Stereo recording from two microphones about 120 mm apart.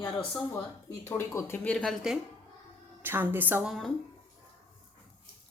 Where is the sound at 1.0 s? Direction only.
25° left (ahead or behind).